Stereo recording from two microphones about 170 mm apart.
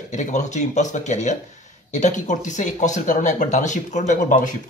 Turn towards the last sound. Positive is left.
turn(degrees=45)  # may be behind; listen again after turning